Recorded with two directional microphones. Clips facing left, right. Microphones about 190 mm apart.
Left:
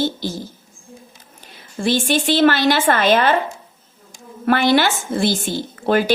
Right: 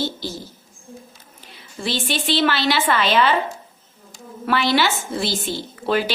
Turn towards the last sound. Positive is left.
turn(degrees=50)  # may be behind; listen again after turning